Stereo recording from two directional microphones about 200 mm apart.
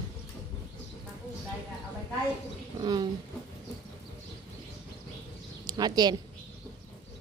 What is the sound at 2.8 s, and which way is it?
Speech, 20° right (ahead or behind).